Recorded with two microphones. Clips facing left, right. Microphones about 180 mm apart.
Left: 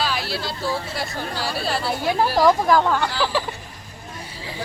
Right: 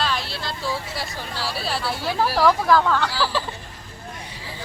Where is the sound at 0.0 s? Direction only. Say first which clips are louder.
Left 1 dB; 5° left (ahead or behind).